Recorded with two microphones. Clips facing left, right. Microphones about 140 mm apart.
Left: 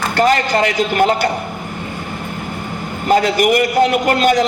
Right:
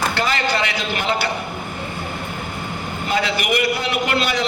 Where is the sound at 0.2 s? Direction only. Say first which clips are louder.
Left 11 dB; 45° left (ahead or behind).